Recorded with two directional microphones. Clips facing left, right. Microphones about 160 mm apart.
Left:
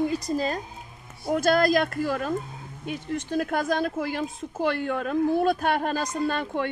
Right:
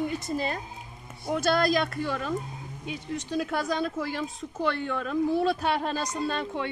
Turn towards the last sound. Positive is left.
turn(degrees=50)  # may be behind; listen again after turning